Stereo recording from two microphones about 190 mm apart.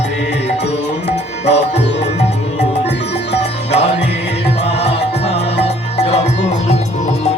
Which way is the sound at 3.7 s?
60° left (ahead or behind).